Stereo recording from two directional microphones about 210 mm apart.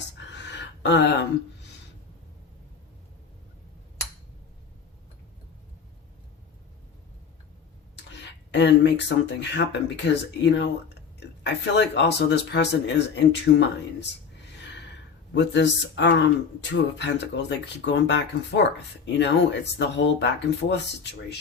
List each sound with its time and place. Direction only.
0.3 s a sound: 55° left (ahead or behind)
7.9 s speech: 55° left (ahead or behind)
15.4 s speech: 55° left (ahead or behind)